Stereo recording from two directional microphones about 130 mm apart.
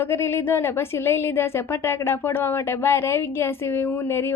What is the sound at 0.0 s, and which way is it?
A woman's voice, 20° left (ahead or behind).